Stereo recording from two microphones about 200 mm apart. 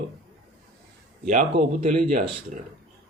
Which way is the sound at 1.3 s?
35° right (ahead or behind).